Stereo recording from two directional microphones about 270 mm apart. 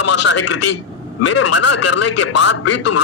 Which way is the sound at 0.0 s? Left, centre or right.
Left.